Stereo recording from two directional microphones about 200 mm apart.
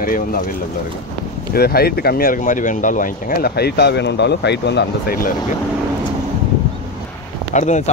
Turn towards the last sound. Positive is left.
turn(degrees=35)  # may be behind; listen again after turning